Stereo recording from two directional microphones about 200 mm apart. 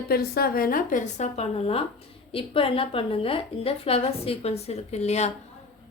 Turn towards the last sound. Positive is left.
turn(degrees=35)  # may be behind; listen again after turning